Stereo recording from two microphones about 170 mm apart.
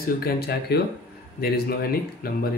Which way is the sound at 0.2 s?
70° left (ahead or behind).